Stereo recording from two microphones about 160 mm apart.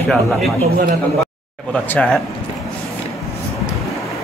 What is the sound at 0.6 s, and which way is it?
Speech, 65° right (ahead or behind).